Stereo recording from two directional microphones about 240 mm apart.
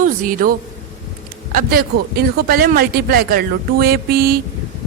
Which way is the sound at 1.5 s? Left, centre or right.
Right.